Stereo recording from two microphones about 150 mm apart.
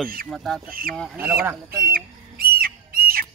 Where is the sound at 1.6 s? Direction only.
75° right (ahead or behind).